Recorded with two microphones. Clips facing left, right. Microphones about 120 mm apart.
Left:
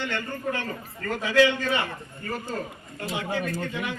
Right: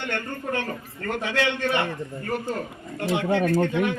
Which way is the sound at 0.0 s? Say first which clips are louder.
Even; 55° right (ahead or behind).